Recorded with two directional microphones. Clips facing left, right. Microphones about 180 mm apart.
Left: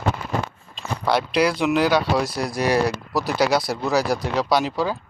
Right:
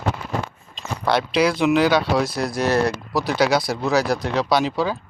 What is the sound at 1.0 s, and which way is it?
Speech, 5° left (ahead or behind).